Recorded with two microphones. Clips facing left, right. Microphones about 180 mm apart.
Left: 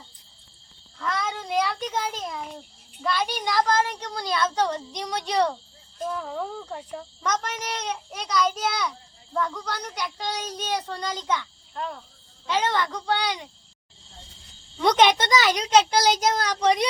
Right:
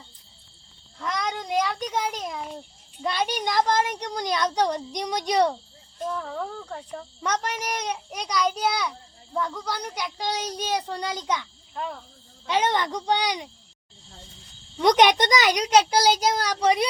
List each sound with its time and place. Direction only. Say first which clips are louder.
0.9 s a sound: even; 15° right (ahead or behind)
1.6 s a child's voice: right 1 dB; 15° right (ahead or behind)
6.0 s a child's voice: even; 5° left (ahead or behind)
7.2 s a child's voice: right 1 dB; 10° right (ahead or behind)
11.8 s speech: even; centre (ahead or behind)
12.5 s a child's voice: right 1 dB; 20° right (ahead or behind)
14.8 s a child's voice: right 1 dB; 15° right (ahead or behind)